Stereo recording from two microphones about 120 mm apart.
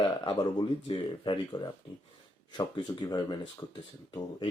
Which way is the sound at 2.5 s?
40° left (ahead or behind).